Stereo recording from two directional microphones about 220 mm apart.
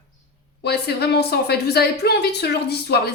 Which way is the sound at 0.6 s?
50° left (ahead or behind).